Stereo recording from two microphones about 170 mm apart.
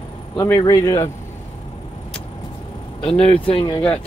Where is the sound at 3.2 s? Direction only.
35° left (ahead or behind).